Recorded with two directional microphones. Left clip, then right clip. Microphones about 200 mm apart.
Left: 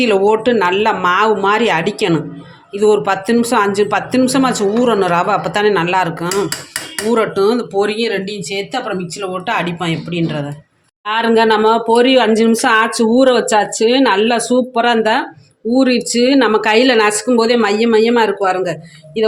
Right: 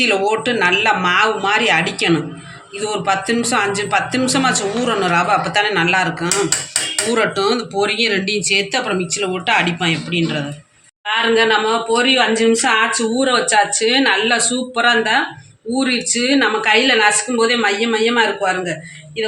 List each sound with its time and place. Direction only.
0.0 s a woman's voice: 55° left (ahead or behind)